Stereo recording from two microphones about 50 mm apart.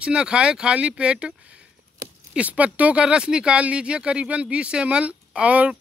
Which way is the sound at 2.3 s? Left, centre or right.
Right.